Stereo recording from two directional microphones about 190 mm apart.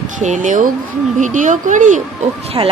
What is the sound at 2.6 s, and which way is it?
Speech, 20° right (ahead or behind).